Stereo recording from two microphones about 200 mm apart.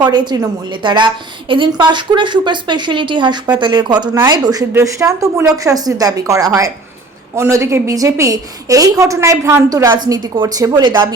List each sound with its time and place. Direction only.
0.0 s a woman's voice: 20° right (ahead or behind)